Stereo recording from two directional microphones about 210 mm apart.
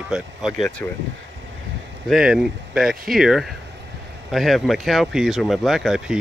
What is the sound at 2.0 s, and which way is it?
Speech, centre (ahead or behind).